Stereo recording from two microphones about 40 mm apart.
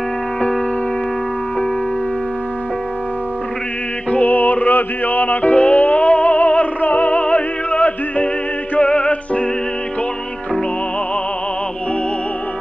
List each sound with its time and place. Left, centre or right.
4.1 s music: left
8.7 s music: left